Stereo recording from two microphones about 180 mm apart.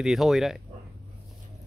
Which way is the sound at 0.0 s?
Centre (ahead or behind).